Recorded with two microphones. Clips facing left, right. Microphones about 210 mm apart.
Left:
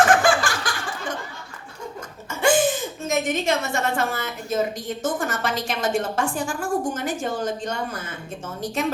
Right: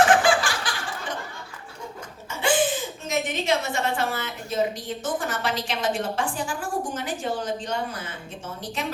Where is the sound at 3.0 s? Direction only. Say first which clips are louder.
Left 3 dB; 45° left (ahead or behind).